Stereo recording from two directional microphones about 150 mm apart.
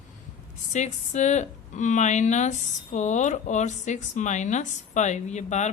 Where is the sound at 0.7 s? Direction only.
50° left (ahead or behind).